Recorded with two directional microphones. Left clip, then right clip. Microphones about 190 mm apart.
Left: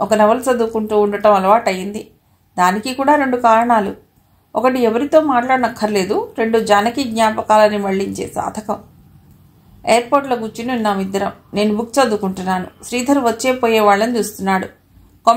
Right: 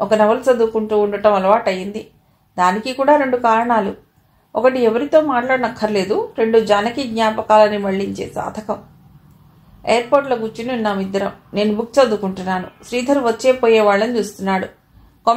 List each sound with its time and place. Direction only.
0.0 s a woman's voice: 40° left (ahead or behind)
9.8 s a woman's voice: 40° left (ahead or behind)